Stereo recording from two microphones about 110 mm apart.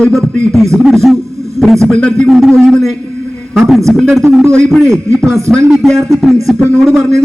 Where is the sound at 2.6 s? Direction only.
5° left (ahead or behind).